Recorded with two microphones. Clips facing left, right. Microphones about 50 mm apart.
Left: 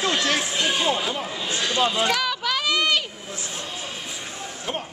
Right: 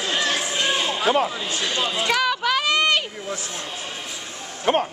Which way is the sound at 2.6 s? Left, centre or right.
Right.